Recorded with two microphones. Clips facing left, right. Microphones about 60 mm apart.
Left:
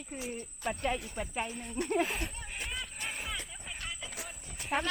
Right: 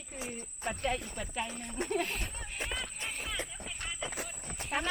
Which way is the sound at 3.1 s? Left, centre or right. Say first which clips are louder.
Even; centre.